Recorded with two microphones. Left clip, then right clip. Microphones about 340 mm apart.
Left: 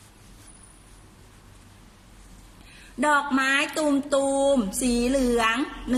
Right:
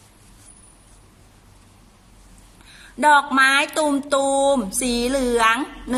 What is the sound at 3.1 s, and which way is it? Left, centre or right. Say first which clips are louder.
Music: right 7 dB; right.